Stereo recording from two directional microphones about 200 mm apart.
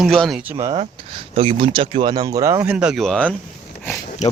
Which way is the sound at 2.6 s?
5° right (ahead or behind).